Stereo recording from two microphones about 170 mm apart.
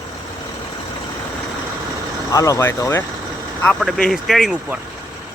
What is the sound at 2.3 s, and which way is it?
Speech, 20° left (ahead or behind).